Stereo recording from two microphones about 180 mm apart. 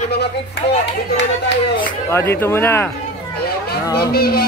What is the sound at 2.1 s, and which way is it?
Speech, 15° left (ahead or behind).